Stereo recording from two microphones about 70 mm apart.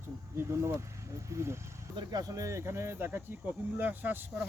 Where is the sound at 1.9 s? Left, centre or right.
Right.